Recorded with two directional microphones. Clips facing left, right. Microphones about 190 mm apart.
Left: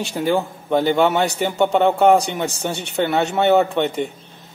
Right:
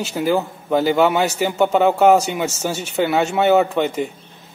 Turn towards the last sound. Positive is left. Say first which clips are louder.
# even
turn(degrees=0)  # may be behind; listen again after turning